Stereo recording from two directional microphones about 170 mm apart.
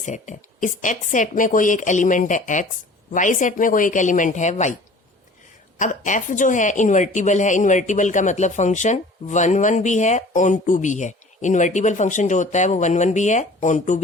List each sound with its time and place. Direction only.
0.0 s a woman's voice: 45° left (ahead or behind)
5.8 s a woman's voice: 50° left (ahead or behind)